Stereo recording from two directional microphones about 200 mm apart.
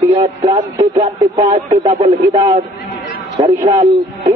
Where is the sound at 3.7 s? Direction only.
30° right (ahead or behind).